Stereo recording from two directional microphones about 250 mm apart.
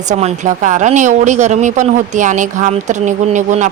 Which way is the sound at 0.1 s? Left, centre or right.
Right.